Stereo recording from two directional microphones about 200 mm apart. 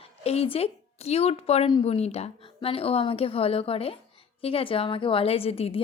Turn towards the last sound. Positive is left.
turn(degrees=30)  # may be behind; listen again after turning